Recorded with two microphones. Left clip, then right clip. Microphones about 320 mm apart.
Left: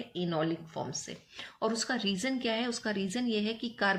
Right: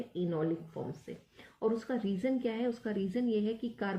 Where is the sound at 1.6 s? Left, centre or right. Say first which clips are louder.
Left 1 dB; left.